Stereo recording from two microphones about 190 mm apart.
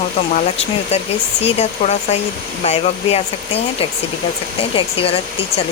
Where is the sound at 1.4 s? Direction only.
35° left (ahead or behind).